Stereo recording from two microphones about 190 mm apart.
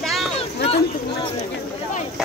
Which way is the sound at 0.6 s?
30° left (ahead or behind).